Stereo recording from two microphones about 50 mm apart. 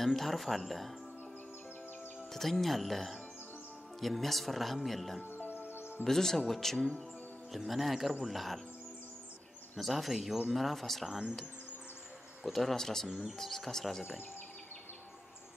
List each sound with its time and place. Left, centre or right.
0.0 s speech: centre
2.3 s speech: centre
5.2 s music: left
6.0 s speech: centre
9.8 s speech: centre
11.1 s speech: centre
12.5 s speech: centre